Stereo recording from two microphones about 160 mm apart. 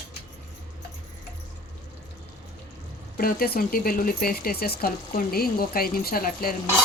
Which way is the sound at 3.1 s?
65° left (ahead or behind).